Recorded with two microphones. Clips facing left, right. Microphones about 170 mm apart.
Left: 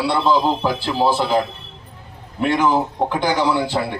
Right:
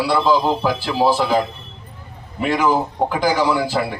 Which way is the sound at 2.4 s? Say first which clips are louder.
Even; 5° right (ahead or behind).